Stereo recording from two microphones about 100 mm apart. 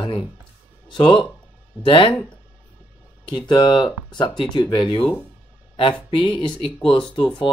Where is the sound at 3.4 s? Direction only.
40° left (ahead or behind).